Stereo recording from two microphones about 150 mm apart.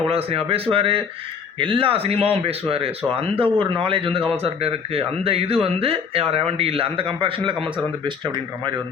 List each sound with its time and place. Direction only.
0.1 s a man's voice: 40° right (ahead or behind)